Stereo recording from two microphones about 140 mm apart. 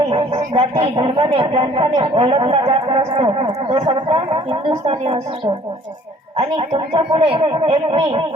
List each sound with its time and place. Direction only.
0.1 s speech: 40° right (ahead or behind)
6.3 s speech: 45° right (ahead or behind)